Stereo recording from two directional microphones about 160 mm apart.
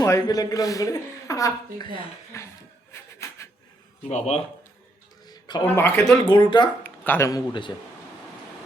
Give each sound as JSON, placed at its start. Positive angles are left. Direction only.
{"t": 0.0, "sound": "speech", "side_deg": 25}
{"t": 2.9, "sound": "a sound", "side_deg": 20}
{"t": 4.1, "sound": "speech", "side_deg": 40}
{"t": 5.2, "sound": "a sound", "side_deg": 25}
{"t": 5.6, "sound": "speech", "side_deg": 10}
{"t": 6.2, "sound": "speech", "side_deg": 25}
{"t": 6.8, "sound": "a man's voice", "side_deg": 10}